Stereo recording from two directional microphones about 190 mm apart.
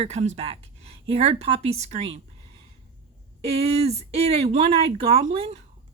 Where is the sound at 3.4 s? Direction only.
30° right (ahead or behind).